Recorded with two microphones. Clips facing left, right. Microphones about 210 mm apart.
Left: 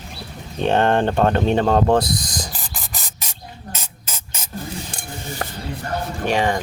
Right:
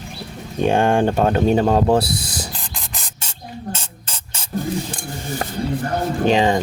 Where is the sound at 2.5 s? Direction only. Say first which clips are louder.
Right 1 dB; 5° left (ahead or behind).